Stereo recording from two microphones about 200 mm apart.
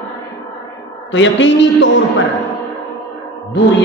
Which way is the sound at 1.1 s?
70° left (ahead or behind).